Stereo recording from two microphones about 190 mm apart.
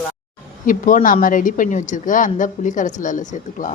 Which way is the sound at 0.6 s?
45° left (ahead or behind).